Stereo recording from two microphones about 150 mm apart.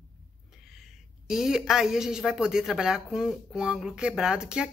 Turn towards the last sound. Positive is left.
turn(degrees=-5)  # may be behind; listen again after turning